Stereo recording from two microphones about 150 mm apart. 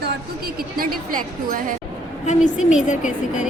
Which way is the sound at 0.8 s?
70° right (ahead or behind).